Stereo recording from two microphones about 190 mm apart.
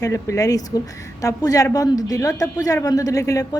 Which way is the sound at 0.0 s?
15° left (ahead or behind).